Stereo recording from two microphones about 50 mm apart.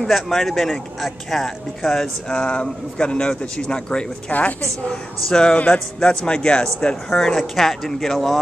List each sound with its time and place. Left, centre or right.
0.1 s speech: centre
4.3 s a woman's voice: left
5.3 s speech: centre
7.1 s speech: centre